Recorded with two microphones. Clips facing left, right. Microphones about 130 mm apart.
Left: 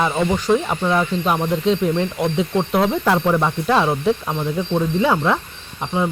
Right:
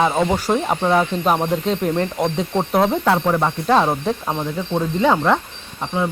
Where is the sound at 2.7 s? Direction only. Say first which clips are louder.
Right 4 dB; 35° right (ahead or behind).